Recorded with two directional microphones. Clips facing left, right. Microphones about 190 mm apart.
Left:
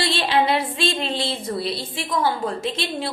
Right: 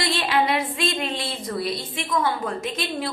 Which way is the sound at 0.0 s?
30° left (ahead or behind).